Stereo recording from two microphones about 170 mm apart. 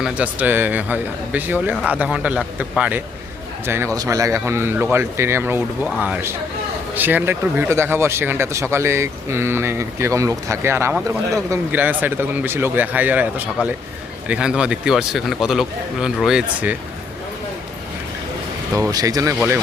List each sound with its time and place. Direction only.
0.0 s a man's voice: 10° right (ahead or behind)
18.7 s speech: 20° right (ahead or behind)